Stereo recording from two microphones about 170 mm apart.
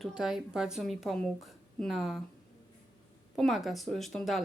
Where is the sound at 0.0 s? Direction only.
5° right (ahead or behind).